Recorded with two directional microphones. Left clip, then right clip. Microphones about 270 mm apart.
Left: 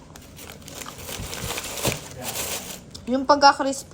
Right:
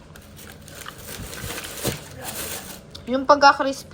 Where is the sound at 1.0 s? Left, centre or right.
Centre.